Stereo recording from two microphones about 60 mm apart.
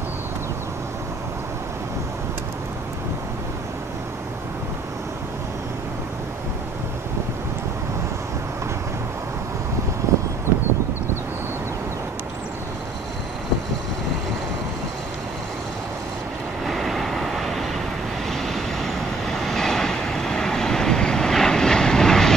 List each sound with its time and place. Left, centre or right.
10.1 s a sound: right
16.6 s train: centre
18.3 s vehicle: centre